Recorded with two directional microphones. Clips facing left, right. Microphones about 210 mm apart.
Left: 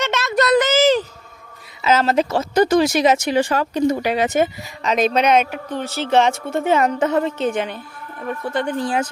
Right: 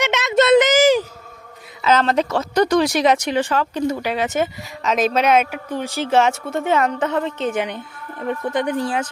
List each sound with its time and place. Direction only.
0.0 s a sound: 20° right (ahead or behind)
1.8 s speech: 5° left (ahead or behind)
3.8 s speech: 20° left (ahead or behind)
4.8 s speech: centre (ahead or behind)
7.5 s speech: 15° right (ahead or behind)